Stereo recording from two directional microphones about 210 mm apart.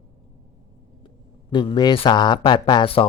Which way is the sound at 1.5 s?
20° left (ahead or behind).